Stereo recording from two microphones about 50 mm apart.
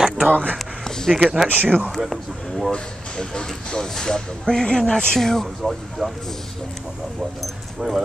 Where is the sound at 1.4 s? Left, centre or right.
Centre.